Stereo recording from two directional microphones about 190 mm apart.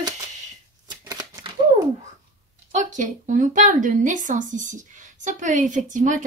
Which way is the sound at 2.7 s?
40° right (ahead or behind).